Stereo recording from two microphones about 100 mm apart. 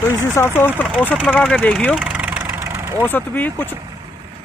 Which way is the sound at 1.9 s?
10° right (ahead or behind).